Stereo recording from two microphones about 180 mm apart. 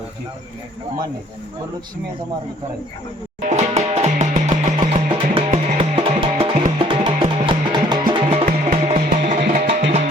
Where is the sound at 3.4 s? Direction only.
40° right (ahead or behind).